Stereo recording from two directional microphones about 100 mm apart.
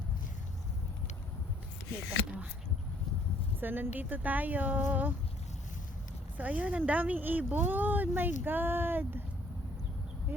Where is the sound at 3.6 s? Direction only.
20° right (ahead or behind).